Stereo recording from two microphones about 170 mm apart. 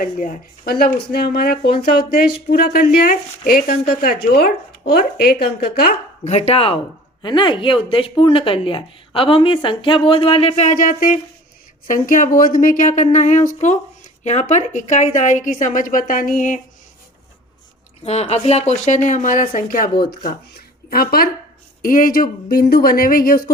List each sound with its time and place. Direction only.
0.0 s speech: 55° left (ahead or behind); by 5.9 s 70° left (ahead or behind)
6.2 s a woman's voice: 40° left (ahead or behind)
18.0 s a woman's voice: 40° left (ahead or behind); by 19.9 s 55° left (ahead or behind)
20.0 s speech: 70° left (ahead or behind)